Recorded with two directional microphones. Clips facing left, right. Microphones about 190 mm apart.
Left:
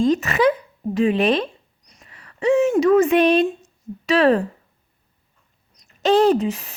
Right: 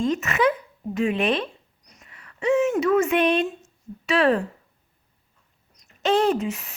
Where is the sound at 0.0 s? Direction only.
35° left (ahead or behind).